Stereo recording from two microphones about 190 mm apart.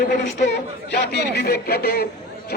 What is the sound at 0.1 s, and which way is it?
A man's voice, 65° left (ahead or behind).